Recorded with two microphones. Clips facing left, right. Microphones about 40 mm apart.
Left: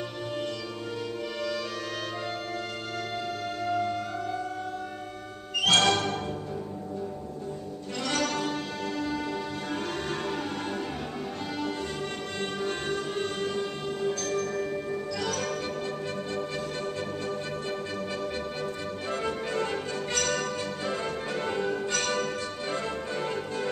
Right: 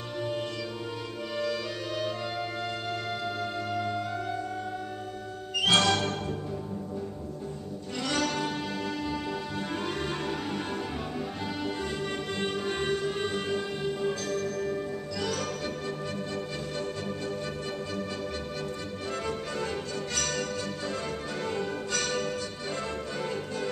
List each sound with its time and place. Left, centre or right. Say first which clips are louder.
3.6 s music: left 6 dB; centre
5.6 s music: left 1 dB; centre
5.9 s music: left 1 dB; centre
8.0 s music: even; centre
12.4 s music: even; centre
19.2 s music: left 4 dB; centre